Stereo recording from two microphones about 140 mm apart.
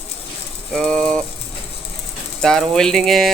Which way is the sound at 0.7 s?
5° left (ahead or behind).